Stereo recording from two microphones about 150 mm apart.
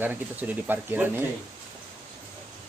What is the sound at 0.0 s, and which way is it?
Speech, 15° right (ahead or behind).